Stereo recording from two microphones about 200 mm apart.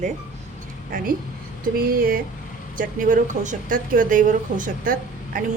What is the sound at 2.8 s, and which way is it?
Speech, 40° right (ahead or behind).